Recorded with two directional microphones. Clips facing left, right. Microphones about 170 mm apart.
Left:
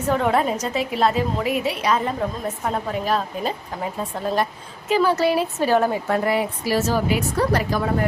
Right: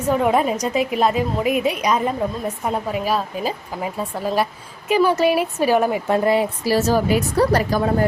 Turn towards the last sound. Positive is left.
turn(degrees=-40)  # may be behind; listen again after turning